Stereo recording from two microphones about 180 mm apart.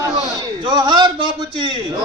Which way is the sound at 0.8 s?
25° right (ahead or behind).